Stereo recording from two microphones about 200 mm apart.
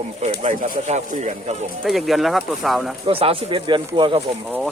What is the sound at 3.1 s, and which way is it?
Speech, 30° right (ahead or behind).